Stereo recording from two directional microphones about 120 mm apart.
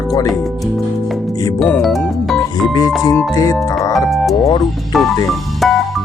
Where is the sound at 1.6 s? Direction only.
5° left (ahead or behind).